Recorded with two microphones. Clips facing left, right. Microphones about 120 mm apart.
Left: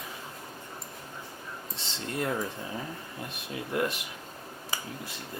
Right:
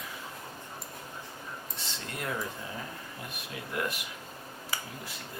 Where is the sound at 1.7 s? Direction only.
25° left (ahead or behind).